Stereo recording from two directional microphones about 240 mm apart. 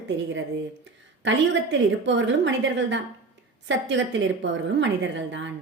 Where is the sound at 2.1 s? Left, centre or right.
Right.